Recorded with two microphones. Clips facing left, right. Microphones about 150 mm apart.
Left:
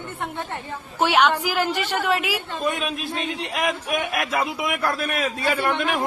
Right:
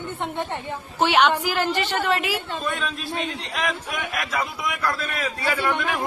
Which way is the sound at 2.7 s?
20° left (ahead or behind).